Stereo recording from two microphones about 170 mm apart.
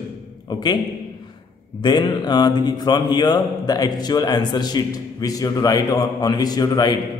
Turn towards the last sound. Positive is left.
turn(degrees=25)  # may be behind; listen again after turning